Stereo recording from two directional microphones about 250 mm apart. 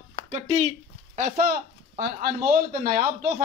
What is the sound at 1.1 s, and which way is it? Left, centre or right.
Speech, right.